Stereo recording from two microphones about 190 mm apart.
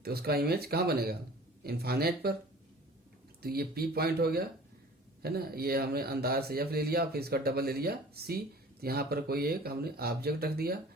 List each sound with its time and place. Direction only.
0.0 s a man's voice: 55° right (ahead or behind)
3.4 s a man's voice: 55° right (ahead or behind)